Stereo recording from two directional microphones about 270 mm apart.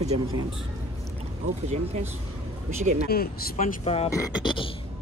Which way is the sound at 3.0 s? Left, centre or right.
Left.